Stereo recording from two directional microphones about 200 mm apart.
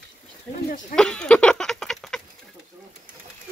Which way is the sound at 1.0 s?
5° left (ahead or behind).